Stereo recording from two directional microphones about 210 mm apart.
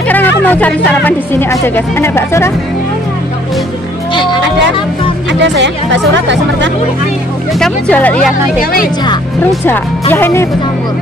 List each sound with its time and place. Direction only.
0.1 s speech: 10° left (ahead or behind)
4.1 s music: 20° left (ahead or behind)
5.4 s speech: 55° right (ahead or behind)
7.5 s speech: 5° left (ahead or behind)
9.4 s speech: 10° left (ahead or behind)